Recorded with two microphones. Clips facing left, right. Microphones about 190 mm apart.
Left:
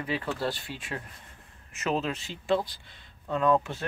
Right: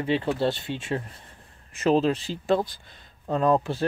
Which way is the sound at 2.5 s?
50° right (ahead or behind).